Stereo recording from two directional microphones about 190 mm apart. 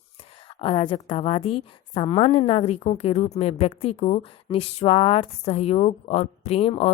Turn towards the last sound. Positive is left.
turn(degrees=30)  # may be behind; listen again after turning